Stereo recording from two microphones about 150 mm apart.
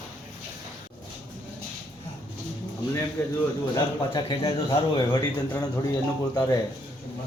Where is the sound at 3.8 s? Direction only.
25° left (ahead or behind).